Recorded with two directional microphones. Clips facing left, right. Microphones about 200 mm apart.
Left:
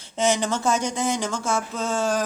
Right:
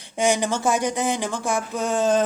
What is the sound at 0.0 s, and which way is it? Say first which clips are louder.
Speech: right 1 dB; 15° right (ahead or behind).